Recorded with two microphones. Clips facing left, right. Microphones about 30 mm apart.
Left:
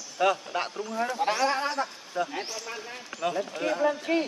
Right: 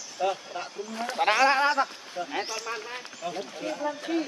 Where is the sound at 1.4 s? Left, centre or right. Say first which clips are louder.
Right 5 dB; right.